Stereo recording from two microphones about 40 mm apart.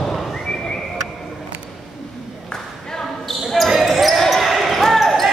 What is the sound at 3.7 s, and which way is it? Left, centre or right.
Basketball bounce, centre.